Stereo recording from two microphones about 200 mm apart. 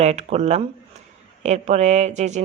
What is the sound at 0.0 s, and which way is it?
Speech, 35° right (ahead or behind).